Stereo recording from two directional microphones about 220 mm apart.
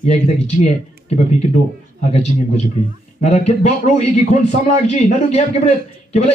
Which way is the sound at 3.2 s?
30° left (ahead or behind).